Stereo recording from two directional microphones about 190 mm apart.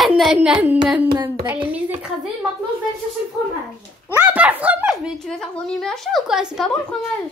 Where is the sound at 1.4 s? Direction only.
10° right (ahead or behind).